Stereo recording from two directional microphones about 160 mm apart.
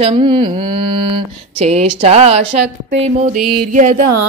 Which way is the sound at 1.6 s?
40° right (ahead or behind).